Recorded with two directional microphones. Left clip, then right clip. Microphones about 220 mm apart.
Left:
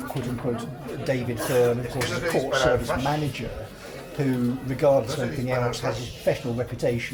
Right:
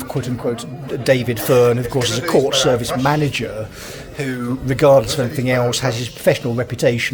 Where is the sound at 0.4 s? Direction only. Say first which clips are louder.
Right 7 dB; 50° right (ahead or behind).